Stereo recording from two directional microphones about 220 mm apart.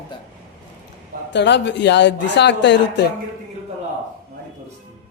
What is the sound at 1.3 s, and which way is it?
Speech, 50° left (ahead or behind).